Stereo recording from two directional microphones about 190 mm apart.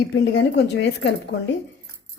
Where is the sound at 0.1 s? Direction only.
70° left (ahead or behind).